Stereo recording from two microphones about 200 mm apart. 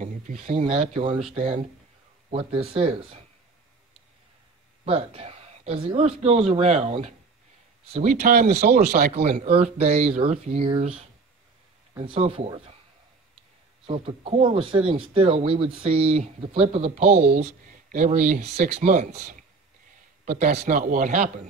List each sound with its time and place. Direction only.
0.0 s a sound: 40° right (ahead or behind)
0.7 s speech: 30° right (ahead or behind)
4.8 s speech: 30° right (ahead or behind)
9.1 s speech: 35° right (ahead or behind)
13.8 s speech: 30° right (ahead or behind)